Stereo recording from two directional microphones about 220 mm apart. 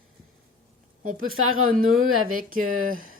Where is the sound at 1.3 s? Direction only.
70° right (ahead or behind).